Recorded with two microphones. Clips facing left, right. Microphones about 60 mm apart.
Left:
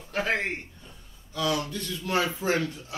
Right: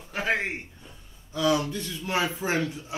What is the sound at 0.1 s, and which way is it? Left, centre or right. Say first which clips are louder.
Speech: even; centre.